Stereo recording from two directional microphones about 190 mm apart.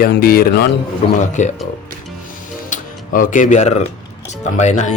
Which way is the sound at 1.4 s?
40° left (ahead or behind).